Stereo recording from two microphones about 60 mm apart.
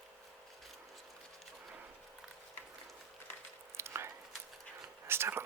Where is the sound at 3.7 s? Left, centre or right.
Right.